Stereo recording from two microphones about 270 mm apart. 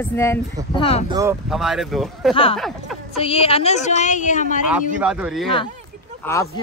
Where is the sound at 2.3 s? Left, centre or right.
Centre.